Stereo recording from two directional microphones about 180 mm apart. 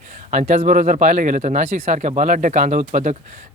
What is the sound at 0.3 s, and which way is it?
Speech, 45° right (ahead or behind).